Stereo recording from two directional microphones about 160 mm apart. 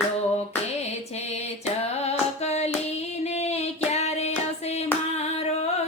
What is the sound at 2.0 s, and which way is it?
Female singing, 40° left (ahead or behind).